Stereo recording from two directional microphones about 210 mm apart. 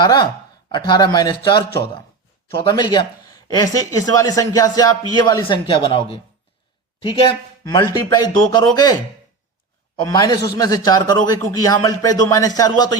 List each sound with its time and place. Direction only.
0.0 s speech: 20° left (ahead or behind)
10.1 s speech: 20° left (ahead or behind)